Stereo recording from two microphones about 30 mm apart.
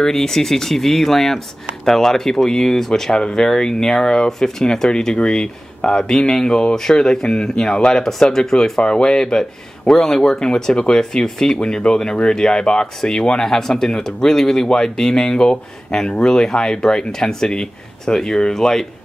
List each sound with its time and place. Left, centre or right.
0.0 s speech: centre
11.6 s speech: left
13.0 s speech: centre
16.1 s speech: left